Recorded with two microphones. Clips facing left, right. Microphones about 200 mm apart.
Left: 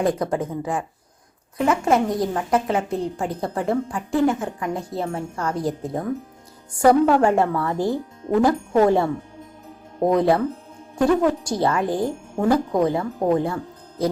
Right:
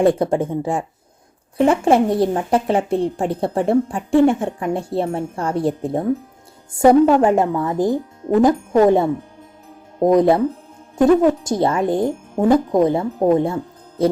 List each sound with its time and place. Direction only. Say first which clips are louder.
0.0 s a woman's voice: right 6 dB; 30° right (ahead or behind)